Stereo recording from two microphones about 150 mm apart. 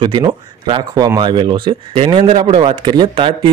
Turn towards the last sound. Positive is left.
turn(degrees=-30)  # may be behind; listen again after turning